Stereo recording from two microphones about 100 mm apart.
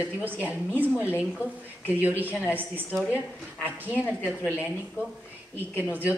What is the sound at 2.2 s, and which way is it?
Speech, 15° right (ahead or behind).